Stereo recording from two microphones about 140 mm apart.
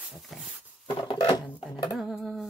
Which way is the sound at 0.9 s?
35° left (ahead or behind).